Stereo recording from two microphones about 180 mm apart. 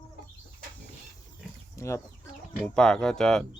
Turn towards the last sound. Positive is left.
turn(degrees=5)  # may be behind; listen again after turning